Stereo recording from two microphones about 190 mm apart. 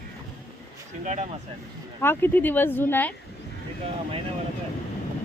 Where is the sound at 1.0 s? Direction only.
35° right (ahead or behind).